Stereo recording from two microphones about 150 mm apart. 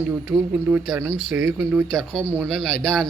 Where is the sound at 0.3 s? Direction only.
5° right (ahead or behind).